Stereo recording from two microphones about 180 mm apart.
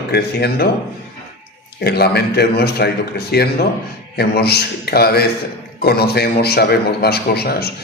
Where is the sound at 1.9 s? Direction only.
65° left (ahead or behind).